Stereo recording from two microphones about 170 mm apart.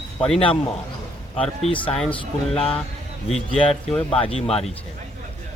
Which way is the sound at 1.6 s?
30° left (ahead or behind).